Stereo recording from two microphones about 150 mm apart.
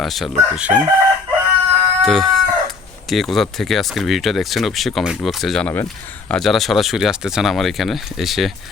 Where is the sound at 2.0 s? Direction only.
Centre (ahead or behind).